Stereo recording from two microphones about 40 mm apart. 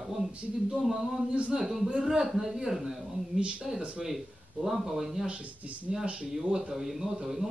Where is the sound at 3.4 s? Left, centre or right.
Right.